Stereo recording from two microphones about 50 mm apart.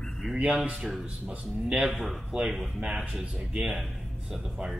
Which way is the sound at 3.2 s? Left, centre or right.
Centre.